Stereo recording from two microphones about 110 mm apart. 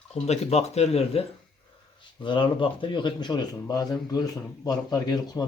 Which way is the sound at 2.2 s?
45° left (ahead or behind).